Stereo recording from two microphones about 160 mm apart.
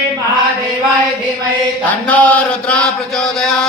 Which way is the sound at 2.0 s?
10° left (ahead or behind).